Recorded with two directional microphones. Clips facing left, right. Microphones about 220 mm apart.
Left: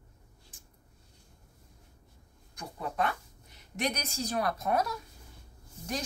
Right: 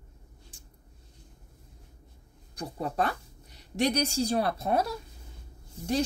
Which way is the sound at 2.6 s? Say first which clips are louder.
Right 3 dB; 35° right (ahead or behind).